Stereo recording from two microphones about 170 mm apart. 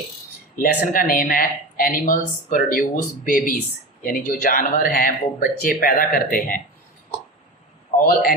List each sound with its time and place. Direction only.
0.6 s a man's voice: 55° left (ahead or behind)
7.9 s a man's voice: 55° left (ahead or behind)